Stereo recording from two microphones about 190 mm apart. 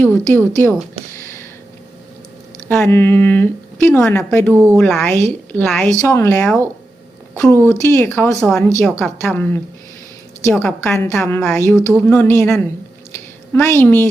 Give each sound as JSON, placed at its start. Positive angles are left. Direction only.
{"t": 0.0, "sound": "speech", "side_deg": 10}
{"t": 1.1, "sound": "a sound", "side_deg": 15}
{"t": 2.6, "sound": "a woman's voice", "side_deg": 10}
{"t": 4.5, "sound": "a woman's voice", "side_deg": -15}
{"t": 4.8, "sound": "a woman's voice", "side_deg": 5}
{"t": 6.0, "sound": "a woman's voice", "side_deg": 15}
{"t": 13.5, "sound": "a woman's voice", "side_deg": 15}